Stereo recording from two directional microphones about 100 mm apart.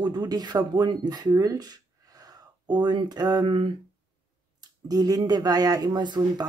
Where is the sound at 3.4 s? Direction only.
55° right (ahead or behind).